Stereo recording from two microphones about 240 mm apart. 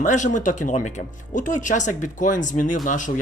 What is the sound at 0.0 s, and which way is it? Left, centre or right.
Speech, left.